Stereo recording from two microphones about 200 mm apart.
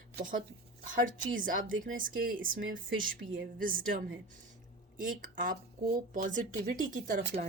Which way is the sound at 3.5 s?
45° right (ahead or behind).